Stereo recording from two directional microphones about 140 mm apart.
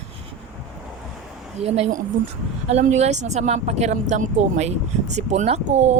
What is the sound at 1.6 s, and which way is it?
Speech, 50° right (ahead or behind).